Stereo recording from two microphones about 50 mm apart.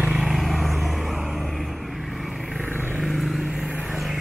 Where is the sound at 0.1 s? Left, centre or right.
Centre.